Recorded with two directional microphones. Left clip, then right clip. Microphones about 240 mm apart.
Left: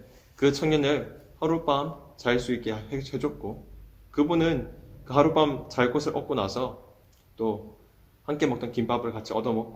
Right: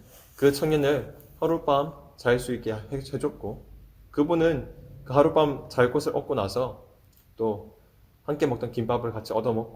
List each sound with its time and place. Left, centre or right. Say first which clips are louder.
0.3 s speech: right 1 dB; right
8.3 s speech: right 1 dB; right